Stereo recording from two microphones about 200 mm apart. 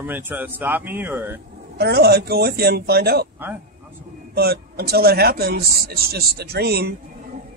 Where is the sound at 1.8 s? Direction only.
55° right (ahead or behind).